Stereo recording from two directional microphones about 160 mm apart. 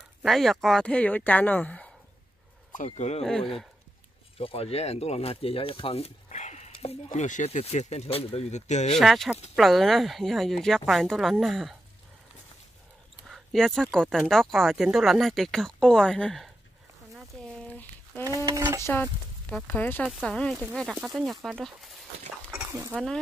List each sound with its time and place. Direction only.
0.2 s speech: centre (ahead or behind)
2.9 s speech: 45° left (ahead or behind)
3.3 s speech: centre (ahead or behind)
4.4 s speech: 35° left (ahead or behind)
7.1 s speech: 50° left (ahead or behind)
8.9 s speech: centre (ahead or behind)
13.3 s a sound: centre (ahead or behind)
13.9 s speech: 5° left (ahead or behind)
17.7 s a sound: 10° left (ahead or behind)
18.3 s a sound: 20° right (ahead or behind)
18.8 s speech: 15° left (ahead or behind)
22.5 s dog: 15° right (ahead or behind)